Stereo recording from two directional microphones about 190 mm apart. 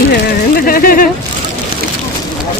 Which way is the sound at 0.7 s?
50° left (ahead or behind).